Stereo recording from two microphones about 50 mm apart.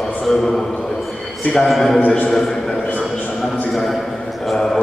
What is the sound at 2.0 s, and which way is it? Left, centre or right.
Speech, left.